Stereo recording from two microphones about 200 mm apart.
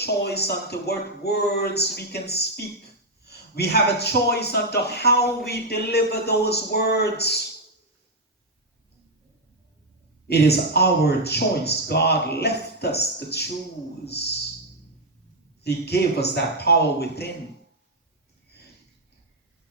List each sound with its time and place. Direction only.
0.0 s speech: 55° left (ahead or behind)
10.2 s speech: 55° left (ahead or behind)
15.6 s speech: 55° left (ahead or behind)